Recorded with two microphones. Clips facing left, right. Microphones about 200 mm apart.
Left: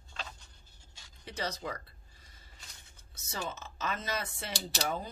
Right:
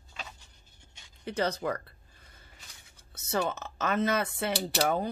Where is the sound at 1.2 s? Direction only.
55° right (ahead or behind).